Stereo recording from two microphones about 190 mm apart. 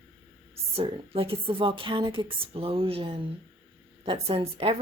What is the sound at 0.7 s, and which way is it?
A woman's voice, 30° right (ahead or behind).